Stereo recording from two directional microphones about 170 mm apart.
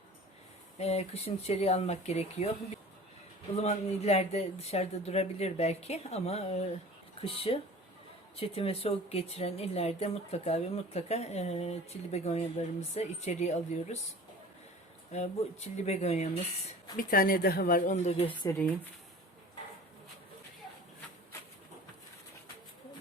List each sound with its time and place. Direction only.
0.8 s speech: 40° left (ahead or behind)
3.6 s speech: 40° left (ahead or behind)
15.1 s speech: 40° left (ahead or behind)
17.0 s speech: 55° left (ahead or behind); by 18.3 s 40° left (ahead or behind)
18.4 s speech: 10° left (ahead or behind)